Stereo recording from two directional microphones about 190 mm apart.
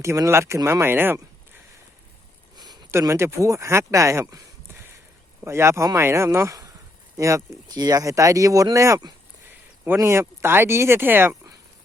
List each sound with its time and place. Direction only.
0.0 s speech: 15° right (ahead or behind)
2.6 s speech: 20° right (ahead or behind)